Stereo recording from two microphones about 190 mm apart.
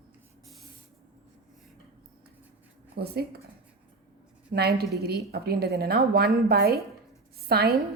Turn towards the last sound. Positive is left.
turn(degrees=-55)  # may be behind; listen again after turning